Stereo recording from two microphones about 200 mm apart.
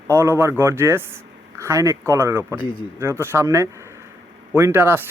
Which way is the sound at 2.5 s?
25° left (ahead or behind).